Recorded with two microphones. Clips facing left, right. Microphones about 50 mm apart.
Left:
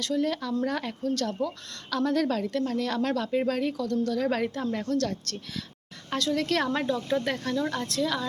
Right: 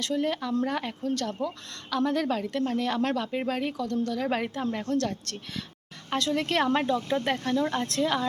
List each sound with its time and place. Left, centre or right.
0.0 s a woman's voice: right
4.1 s a woman's voice: centre
4.9 s a woman's voice: right
7.8 s a woman's voice: right